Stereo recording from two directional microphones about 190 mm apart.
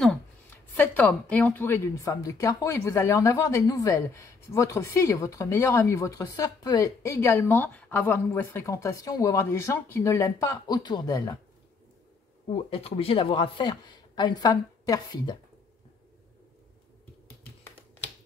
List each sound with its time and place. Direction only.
0.7 s a woman's voice: 10° left (ahead or behind)
12.6 s speech: 30° left (ahead or behind)